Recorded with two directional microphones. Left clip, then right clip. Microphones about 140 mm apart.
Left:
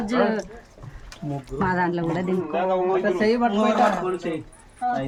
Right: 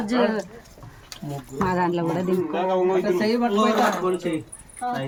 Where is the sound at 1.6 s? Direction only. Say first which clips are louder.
Right 1 dB; 5° right (ahead or behind).